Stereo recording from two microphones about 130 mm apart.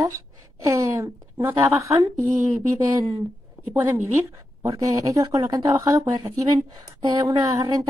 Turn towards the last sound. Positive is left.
turn(degrees=-30)  # may be behind; listen again after turning